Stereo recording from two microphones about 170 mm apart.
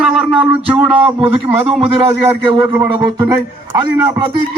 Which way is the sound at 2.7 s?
20° right (ahead or behind).